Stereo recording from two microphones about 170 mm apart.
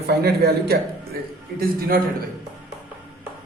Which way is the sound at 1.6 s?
60° right (ahead or behind).